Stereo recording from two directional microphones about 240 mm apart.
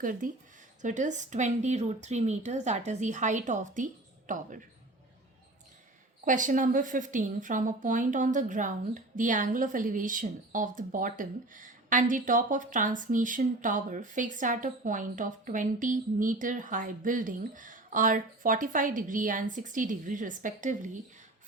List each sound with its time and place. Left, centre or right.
0.0 s a woman's voice: right
6.2 s a woman's voice: right